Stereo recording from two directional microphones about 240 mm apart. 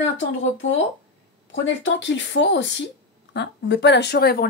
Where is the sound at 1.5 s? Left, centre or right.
Left.